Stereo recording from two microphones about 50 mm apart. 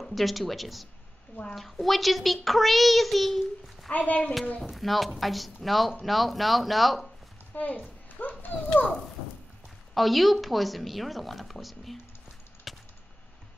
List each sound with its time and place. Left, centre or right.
0.0 s speech: centre
3.9 s a child's voice: left
4.6 s speech: centre
7.5 s a child's voice: left
8.2 s a sound: left
9.9 s speech: centre
12.7 s a sound: centre